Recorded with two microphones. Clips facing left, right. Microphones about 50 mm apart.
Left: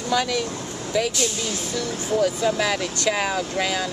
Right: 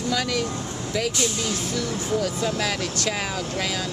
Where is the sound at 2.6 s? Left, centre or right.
Centre.